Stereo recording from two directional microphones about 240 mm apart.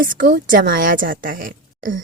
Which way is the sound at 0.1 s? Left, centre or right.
Right.